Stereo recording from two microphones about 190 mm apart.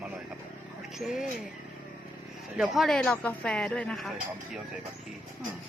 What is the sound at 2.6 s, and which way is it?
Speech, centre (ahead or behind).